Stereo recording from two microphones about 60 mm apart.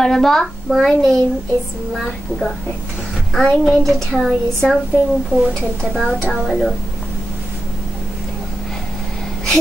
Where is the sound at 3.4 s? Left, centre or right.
Centre.